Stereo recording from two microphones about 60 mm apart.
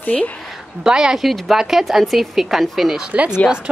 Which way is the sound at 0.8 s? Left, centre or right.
Centre.